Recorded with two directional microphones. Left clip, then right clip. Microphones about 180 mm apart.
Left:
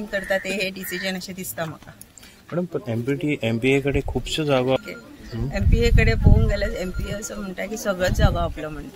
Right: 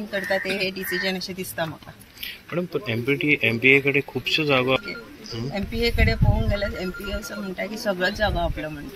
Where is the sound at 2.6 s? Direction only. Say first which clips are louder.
Even; 50° left (ahead or behind); by 4.8 s 65° left (ahead or behind).